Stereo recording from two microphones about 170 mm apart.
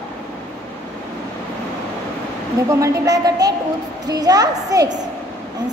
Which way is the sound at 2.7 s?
20° right (ahead or behind).